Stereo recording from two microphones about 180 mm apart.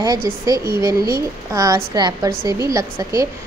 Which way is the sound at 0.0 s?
20° right (ahead or behind).